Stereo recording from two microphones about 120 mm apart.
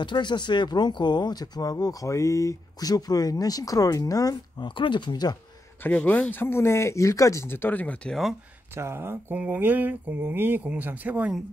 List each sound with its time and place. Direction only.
0.0 s speech: 40° left (ahead or behind)
5.9 s speech: 15° left (ahead or behind)
8.7 s speech: 20° right (ahead or behind)